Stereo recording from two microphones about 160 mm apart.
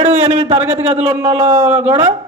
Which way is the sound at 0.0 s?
40° right (ahead or behind).